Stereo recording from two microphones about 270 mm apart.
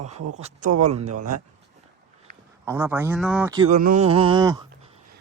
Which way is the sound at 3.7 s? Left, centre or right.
Right.